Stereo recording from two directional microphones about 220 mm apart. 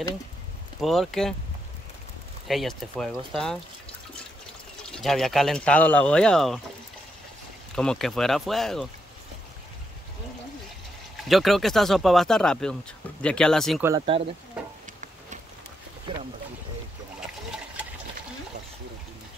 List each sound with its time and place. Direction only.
0.7 s speech: centre (ahead or behind)
2.4 s speech: centre (ahead or behind)
4.9 s speech: centre (ahead or behind)
7.7 s speech: 5° left (ahead or behind)
11.2 s speech: centre (ahead or behind)
14.0 s speech: 25° right (ahead or behind)